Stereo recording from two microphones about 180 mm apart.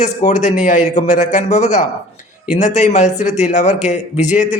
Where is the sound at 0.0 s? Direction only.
45° left (ahead or behind).